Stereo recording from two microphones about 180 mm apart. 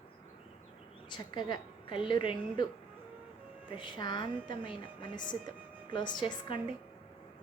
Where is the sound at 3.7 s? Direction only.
25° left (ahead or behind).